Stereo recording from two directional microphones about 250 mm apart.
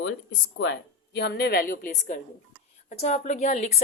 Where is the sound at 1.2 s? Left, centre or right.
Left.